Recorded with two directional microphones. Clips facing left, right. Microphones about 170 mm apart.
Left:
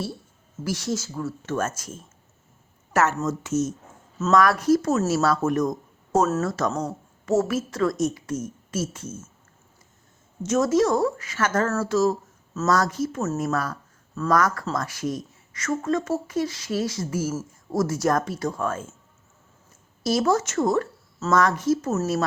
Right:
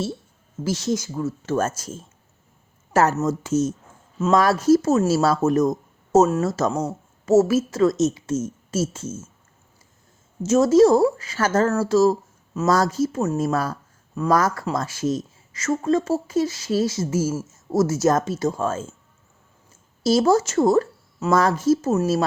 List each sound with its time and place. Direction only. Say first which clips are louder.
0.6 s speech: right 4 dB; 25° right (ahead or behind)
1.5 s speech: right 4 dB; 30° right (ahead or behind)
6.7 s speech: right 3 dB; 5° right (ahead or behind)
7.3 s speech: right 6 dB; 25° right (ahead or behind)
10.4 s speech: right 6 dB; 30° right (ahead or behind)
20.0 s speech: right 4 dB; 30° right (ahead or behind)